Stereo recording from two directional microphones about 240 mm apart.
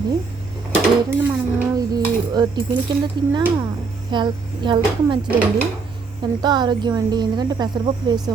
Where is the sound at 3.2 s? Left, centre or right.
Centre.